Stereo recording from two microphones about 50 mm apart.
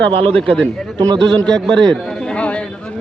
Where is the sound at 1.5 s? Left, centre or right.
Centre.